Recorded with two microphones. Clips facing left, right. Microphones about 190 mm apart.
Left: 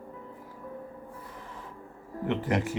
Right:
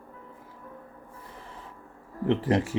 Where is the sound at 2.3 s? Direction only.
30° right (ahead or behind).